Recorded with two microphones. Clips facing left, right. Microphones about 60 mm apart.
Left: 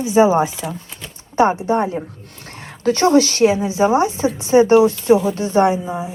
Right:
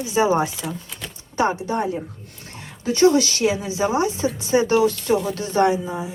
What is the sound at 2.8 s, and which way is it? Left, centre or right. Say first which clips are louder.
Speech: left 3 dB; left.